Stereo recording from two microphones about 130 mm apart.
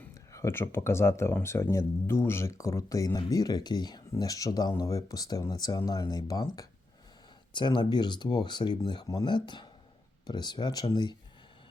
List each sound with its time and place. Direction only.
0.1 s speech: 25° left (ahead or behind)
7.5 s speech: 35° left (ahead or behind)